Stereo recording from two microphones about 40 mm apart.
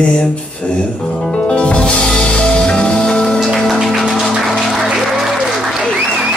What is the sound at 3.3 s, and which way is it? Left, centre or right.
Music, centre.